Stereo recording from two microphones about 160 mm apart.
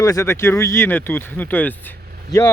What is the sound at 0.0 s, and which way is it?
Speech, 20° left (ahead or behind).